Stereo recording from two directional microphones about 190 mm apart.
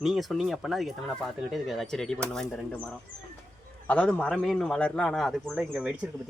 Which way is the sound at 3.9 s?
5° left (ahead or behind).